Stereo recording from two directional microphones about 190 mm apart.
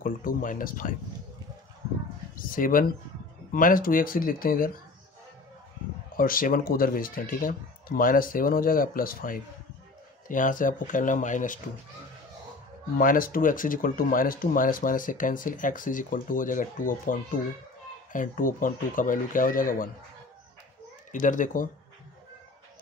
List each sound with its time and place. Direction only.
0.0 s speech: 45° left (ahead or behind)
2.3 s speech: 45° left (ahead or behind)
6.1 s speech: 50° left (ahead or behind)
12.9 s speech: 50° left (ahead or behind)
21.1 s speech: 40° left (ahead or behind)